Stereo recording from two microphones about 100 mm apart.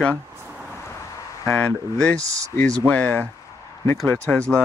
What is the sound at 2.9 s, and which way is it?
Speech, 20° left (ahead or behind).